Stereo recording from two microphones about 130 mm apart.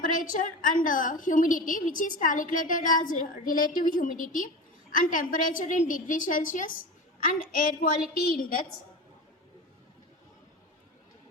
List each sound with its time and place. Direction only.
0.0 s a woman's voice: 90° left